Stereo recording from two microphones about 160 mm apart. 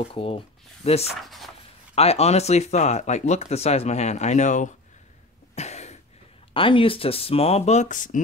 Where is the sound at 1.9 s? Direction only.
40° left (ahead or behind).